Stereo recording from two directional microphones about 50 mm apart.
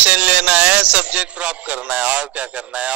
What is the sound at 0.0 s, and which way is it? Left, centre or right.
Speech, right.